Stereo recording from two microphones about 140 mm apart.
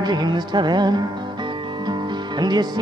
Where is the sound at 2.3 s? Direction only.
30° right (ahead or behind).